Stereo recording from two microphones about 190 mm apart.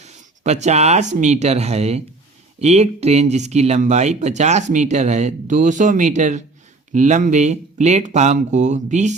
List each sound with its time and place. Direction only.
0.0 s speech: 35° right (ahead or behind)